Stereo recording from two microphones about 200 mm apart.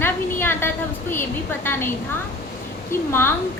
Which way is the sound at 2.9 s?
10° left (ahead or behind).